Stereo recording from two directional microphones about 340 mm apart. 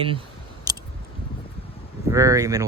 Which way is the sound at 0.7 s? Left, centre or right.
Centre.